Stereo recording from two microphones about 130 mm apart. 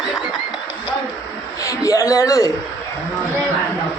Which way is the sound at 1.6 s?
25° left (ahead or behind).